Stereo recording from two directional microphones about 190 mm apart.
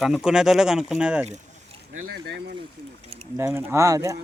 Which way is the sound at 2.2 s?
60° right (ahead or behind).